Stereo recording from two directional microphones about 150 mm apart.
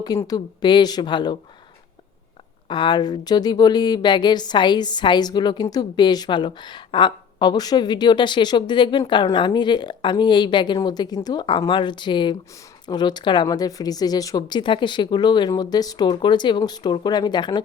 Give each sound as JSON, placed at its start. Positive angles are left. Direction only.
{"t": 0.2, "sound": "speech", "side_deg": 25}
{"t": 2.6, "sound": "a woman's voice", "side_deg": 30}